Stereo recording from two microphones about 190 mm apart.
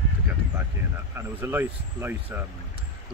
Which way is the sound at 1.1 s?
10° right (ahead or behind).